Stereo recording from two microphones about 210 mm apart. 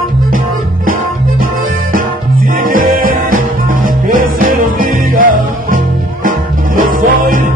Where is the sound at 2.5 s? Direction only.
40° right (ahead or behind).